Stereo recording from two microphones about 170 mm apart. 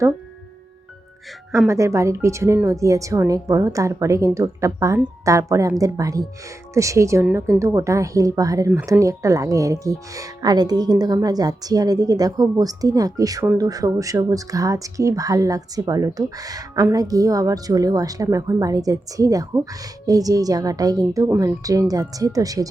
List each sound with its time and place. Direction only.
1.6 s speech: 20° right (ahead or behind)